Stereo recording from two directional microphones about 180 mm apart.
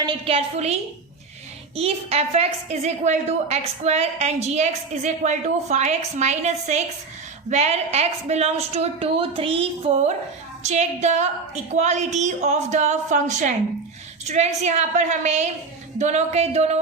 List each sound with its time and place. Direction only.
0.0 s a woman's voice: 30° right (ahead or behind)